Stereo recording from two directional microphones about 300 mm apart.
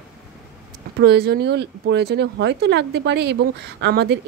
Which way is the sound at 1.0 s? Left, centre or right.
Right.